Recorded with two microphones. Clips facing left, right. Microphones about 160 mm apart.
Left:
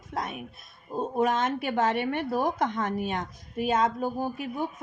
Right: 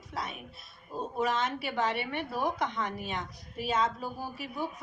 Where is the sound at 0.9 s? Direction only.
50° left (ahead or behind).